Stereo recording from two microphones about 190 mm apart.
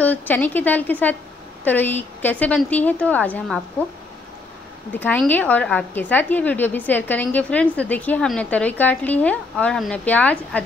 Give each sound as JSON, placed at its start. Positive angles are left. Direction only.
{"t": 0.0, "sound": "a woman's voice", "side_deg": 10}
{"t": 4.9, "sound": "a woman's voice", "side_deg": 10}